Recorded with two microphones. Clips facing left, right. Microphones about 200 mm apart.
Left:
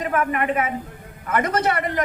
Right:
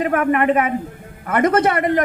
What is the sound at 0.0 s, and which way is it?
A woman's voice, 55° right (ahead or behind).